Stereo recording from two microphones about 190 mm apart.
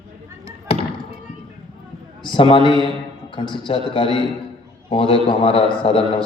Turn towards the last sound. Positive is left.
turn(degrees=30)  # may be behind; listen again after turning